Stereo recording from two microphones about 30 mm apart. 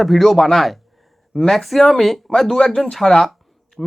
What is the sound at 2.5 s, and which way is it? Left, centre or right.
Speech, centre.